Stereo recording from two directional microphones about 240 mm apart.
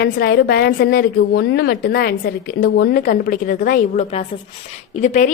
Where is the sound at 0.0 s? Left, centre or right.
Left.